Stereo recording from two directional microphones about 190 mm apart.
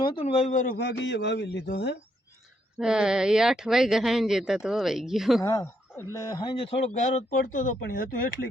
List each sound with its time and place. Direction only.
0.0 s a man's voice: 25° left (ahead or behind); by 0.8 s 40° left (ahead or behind)
0.8 s a man's voice: 65° left (ahead or behind)
2.7 s speech: 5° right (ahead or behind)
5.4 s a man's voice: 20° left (ahead or behind); by 8.4 s 50° left (ahead or behind)